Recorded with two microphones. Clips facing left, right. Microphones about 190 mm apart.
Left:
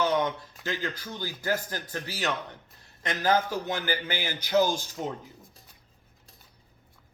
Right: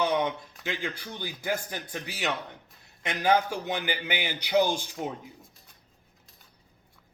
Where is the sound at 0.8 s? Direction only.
15° right (ahead or behind).